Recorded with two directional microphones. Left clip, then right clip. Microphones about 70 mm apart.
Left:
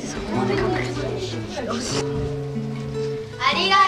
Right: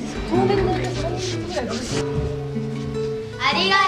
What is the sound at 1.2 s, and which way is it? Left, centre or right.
Speech, right.